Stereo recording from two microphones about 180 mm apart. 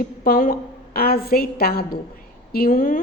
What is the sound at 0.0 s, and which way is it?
A woman's voice, 50° left (ahead or behind).